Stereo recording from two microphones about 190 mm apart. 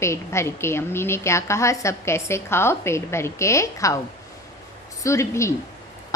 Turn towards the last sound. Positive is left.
turn(degrees=15)  # may be behind; listen again after turning